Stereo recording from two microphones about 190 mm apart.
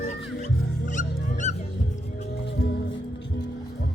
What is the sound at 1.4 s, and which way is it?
Music, 35° left (ahead or behind).